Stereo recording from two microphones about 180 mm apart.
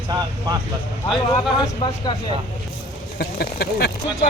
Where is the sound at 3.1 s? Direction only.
60° left (ahead or behind).